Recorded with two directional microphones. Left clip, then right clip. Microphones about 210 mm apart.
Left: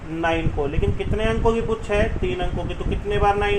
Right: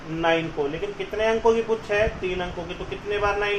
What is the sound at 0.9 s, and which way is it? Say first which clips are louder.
Speech: right 1 dB; 40° left (ahead or behind).